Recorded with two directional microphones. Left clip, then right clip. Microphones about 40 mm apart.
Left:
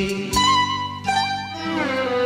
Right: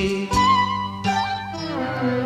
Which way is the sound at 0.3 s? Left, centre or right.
Left.